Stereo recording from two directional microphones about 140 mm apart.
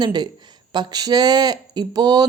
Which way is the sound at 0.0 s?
30° right (ahead or behind).